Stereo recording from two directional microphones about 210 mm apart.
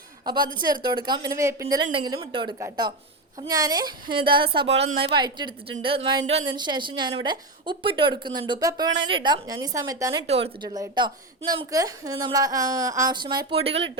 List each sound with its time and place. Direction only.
0.3 s a woman's voice: 20° right (ahead or behind)
4.6 s a woman's voice: 55° right (ahead or behind)
4.9 s a woman's voice: 25° right (ahead or behind)
10.2 s a woman's voice: 30° right (ahead or behind)